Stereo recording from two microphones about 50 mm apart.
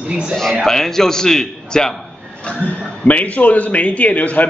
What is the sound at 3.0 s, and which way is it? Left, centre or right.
A man's voice, left.